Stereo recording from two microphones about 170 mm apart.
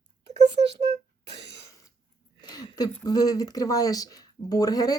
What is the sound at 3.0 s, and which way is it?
Speech, 20° left (ahead or behind).